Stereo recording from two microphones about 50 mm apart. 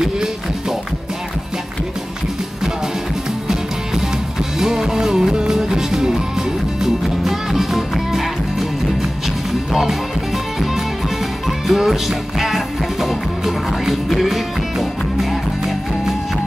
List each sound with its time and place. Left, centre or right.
0.0 s music: centre
4.6 s music: centre